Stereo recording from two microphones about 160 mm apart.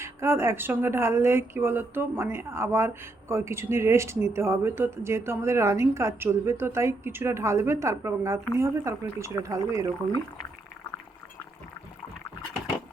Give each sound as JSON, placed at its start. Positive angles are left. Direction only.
{"t": 0.0, "sound": "speech", "side_deg": -15}